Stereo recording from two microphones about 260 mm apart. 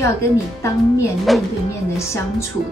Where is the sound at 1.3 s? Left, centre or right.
Centre.